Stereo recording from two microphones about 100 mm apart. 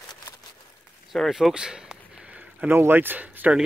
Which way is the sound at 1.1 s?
Centre (ahead or behind).